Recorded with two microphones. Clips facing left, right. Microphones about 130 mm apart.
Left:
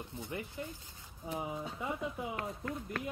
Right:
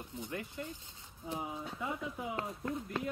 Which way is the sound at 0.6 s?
20° left (ahead or behind).